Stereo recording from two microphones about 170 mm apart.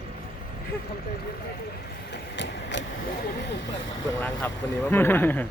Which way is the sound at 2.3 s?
90° left.